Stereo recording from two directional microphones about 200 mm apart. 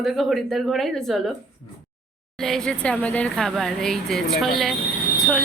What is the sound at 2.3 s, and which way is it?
A woman's voice, centre (ahead or behind).